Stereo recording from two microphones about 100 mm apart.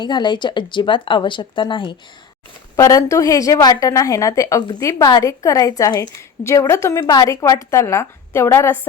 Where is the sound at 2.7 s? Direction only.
35° left (ahead or behind).